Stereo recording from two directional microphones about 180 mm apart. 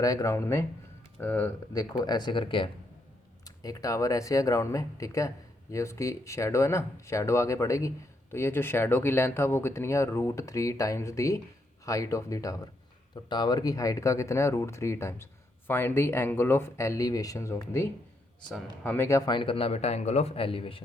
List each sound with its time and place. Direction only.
0.0 s speech: 20° left (ahead or behind)